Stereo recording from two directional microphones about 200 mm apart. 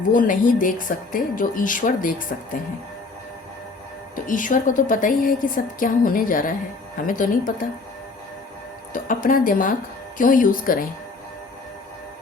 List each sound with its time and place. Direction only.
0.1 s a woman's voice: 40° left (ahead or behind)
4.1 s a woman's voice: 40° left (ahead or behind)
8.9 s a woman's voice: 40° left (ahead or behind)